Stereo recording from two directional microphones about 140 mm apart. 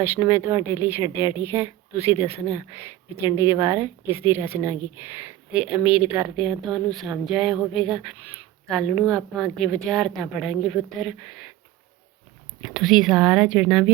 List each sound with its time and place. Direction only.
0.0 s speech: 15° right (ahead or behind); by 11.4 s centre (ahead or behind)
12.6 s speech: centre (ahead or behind)